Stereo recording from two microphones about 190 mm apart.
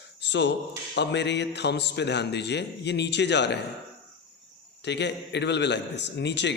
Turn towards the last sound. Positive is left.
turn(degrees=65)  # may be behind; listen again after turning